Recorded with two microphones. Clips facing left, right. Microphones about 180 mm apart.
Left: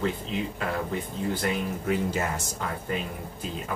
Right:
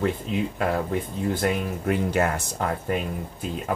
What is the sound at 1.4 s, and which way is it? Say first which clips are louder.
Speech: right 3 dB; 60° right (ahead or behind).